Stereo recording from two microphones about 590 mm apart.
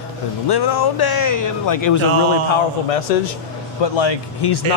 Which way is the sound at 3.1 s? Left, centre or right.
Left.